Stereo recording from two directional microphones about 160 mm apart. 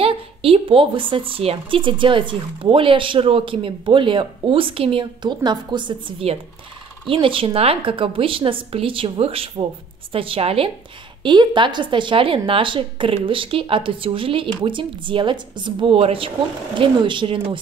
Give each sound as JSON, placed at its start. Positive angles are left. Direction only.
{"t": 0.0, "sound": "speech", "side_deg": -35}